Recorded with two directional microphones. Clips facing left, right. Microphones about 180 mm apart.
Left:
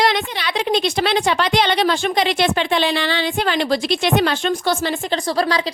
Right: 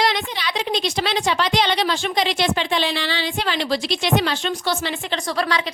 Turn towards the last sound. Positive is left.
turn(degrees=35)  # may be behind; listen again after turning